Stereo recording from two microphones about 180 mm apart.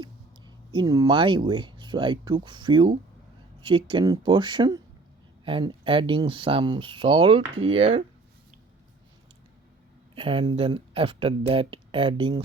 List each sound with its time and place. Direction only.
0.0 s speech: 25° right (ahead or behind)
10.2 s speech: 30° right (ahead or behind)